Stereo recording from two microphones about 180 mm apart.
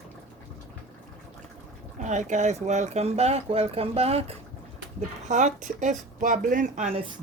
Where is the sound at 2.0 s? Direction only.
40° right (ahead or behind).